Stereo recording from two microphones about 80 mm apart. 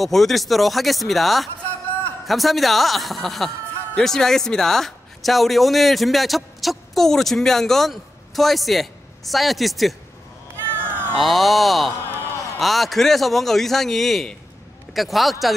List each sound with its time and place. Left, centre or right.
0.0 s a man's voice: centre
10.7 s cat: right
11.1 s a man's voice: centre